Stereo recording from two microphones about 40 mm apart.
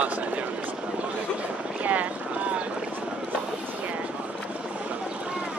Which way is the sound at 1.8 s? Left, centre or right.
Right.